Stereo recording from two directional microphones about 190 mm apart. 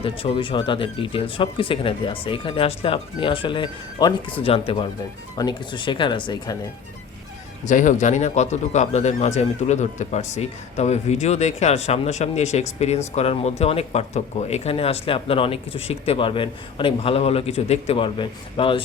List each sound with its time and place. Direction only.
0.0 s speech: 30° left (ahead or behind)
7.6 s speech: 40° left (ahead or behind); by 18.8 s 25° left (ahead or behind)